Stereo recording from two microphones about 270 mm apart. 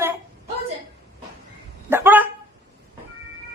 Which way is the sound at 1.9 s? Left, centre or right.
Centre.